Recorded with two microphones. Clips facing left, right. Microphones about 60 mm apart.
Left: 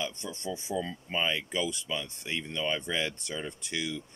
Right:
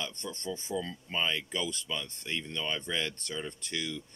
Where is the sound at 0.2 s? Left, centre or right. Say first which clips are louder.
Left 1 dB; centre.